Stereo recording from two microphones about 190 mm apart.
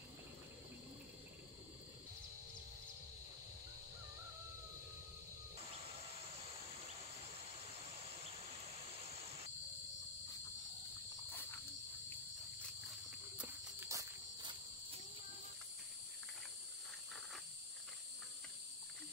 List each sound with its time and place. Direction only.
13.4 s cricket: 15° right (ahead or behind)